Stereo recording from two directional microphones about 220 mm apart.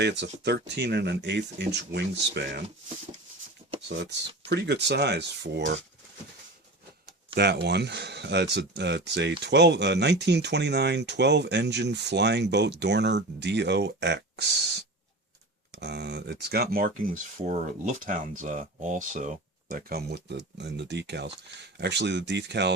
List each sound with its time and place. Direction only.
0.0 s speech: 50° right (ahead or behind)
3.8 s speech: 50° right (ahead or behind)
7.3 s speech: 45° right (ahead or behind)